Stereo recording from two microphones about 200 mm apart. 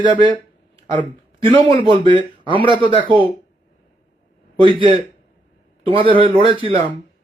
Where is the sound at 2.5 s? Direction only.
25° right (ahead or behind).